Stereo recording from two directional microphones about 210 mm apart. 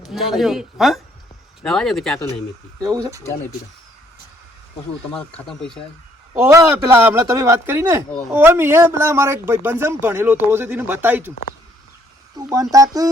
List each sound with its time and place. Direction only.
0.1 s speech: centre (ahead or behind)
2.8 s speech: 20° right (ahead or behind)
5.1 s speech: 5° left (ahead or behind)
6.4 s speech: 10° right (ahead or behind)
12.4 s speech: 15° right (ahead or behind)